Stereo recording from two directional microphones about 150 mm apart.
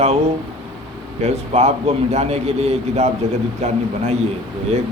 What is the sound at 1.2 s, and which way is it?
Speech, 45° right (ahead or behind).